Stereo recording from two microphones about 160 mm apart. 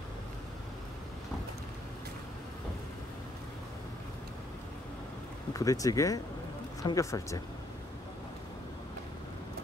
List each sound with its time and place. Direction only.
5.5 s speech: 20° left (ahead or behind)